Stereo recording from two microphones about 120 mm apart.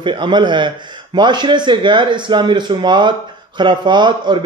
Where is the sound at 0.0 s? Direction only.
40° right (ahead or behind).